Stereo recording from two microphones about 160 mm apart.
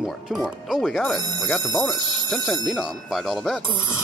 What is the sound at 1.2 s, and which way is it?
Speech, 25° right (ahead or behind).